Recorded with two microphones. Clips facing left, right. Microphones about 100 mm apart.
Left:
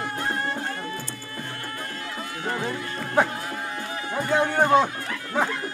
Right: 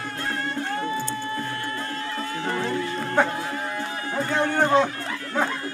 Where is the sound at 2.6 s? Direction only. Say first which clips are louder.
Right 4 dB; 10° left (ahead or behind).